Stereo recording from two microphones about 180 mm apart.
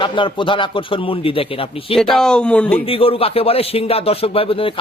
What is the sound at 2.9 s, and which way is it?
Speech, 30° left (ahead or behind).